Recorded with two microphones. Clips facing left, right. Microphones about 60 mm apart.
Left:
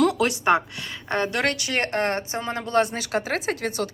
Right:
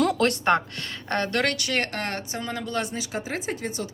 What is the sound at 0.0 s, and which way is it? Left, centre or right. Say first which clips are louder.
A woman's voice: left 1 dB; centre.